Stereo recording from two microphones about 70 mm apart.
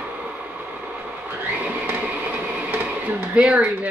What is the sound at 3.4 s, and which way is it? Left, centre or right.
Speech, centre.